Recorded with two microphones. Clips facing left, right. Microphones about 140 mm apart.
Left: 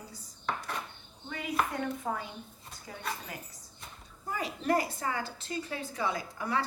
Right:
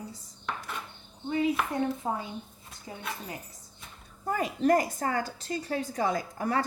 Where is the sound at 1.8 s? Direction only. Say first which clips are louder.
Right 4 dB; 25° right (ahead or behind).